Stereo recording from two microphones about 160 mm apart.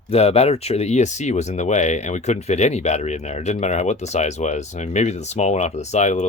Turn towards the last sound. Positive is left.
turn(degrees=45)  # may be behind; listen again after turning